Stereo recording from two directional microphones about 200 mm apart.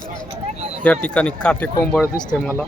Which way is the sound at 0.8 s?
5° left (ahead or behind).